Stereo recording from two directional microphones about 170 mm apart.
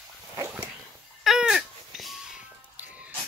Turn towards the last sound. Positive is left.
turn(degrees=-10)  # may be behind; listen again after turning